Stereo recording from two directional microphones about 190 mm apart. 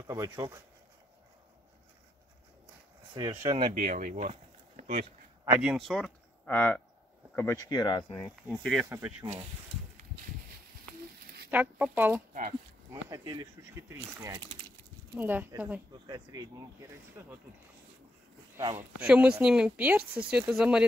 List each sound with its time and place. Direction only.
0.0 s speech: 20° right (ahead or behind)
3.2 s speech: 25° right (ahead or behind)
3.7 s speech: 45° right (ahead or behind)
5.6 s speech: centre (ahead or behind); by 8.0 s 20° left (ahead or behind)
8.1 s speech: 5° left (ahead or behind)
8.8 s speech: 15° right (ahead or behind)
9.2 s speech: 30° right (ahead or behind)
11.5 s speech: 10° right (ahead or behind)
12.9 s speech: 20° right (ahead or behind)
18.8 s speech: 5° right (ahead or behind)